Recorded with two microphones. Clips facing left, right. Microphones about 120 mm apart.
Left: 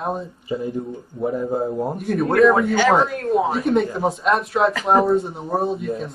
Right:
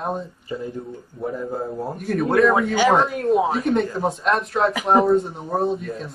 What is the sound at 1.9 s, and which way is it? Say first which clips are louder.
Speech: even; 5° left (ahead or behind).